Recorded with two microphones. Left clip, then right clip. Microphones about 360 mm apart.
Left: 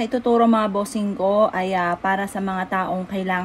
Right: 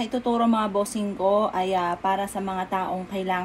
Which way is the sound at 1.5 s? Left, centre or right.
Left.